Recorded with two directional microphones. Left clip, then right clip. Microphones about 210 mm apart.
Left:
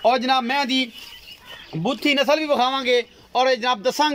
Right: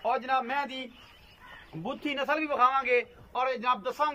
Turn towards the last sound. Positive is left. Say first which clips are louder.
# left 8 dB
turn(degrees=35)  # may be behind; listen again after turning